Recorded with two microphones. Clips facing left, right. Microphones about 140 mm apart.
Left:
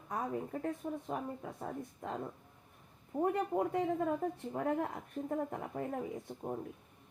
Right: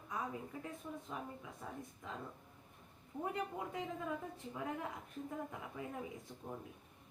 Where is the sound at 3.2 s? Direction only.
50° left (ahead or behind).